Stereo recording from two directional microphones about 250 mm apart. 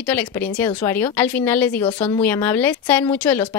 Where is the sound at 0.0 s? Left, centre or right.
Centre.